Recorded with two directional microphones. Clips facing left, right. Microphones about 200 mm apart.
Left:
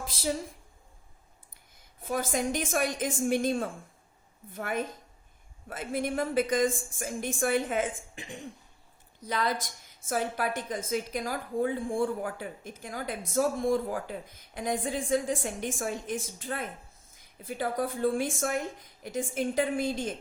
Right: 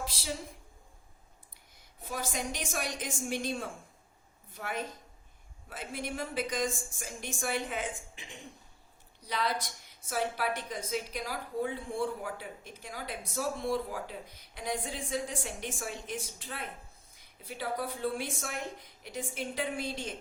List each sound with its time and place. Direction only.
2.1 s a woman's voice: 50° left (ahead or behind)